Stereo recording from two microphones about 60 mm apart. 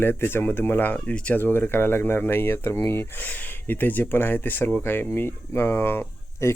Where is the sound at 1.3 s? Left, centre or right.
Left.